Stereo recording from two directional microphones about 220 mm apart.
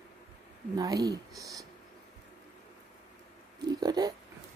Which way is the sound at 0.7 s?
15° right (ahead or behind).